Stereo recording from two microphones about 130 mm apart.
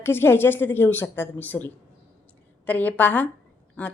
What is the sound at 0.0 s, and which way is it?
A woman's voice, 20° left (ahead or behind).